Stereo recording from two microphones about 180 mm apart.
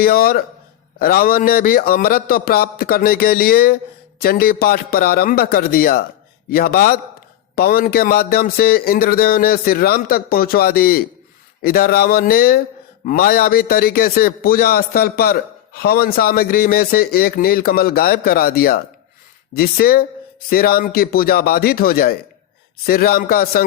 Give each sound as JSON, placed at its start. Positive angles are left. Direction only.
{"t": 0.0, "sound": "a man's voice", "side_deg": 55}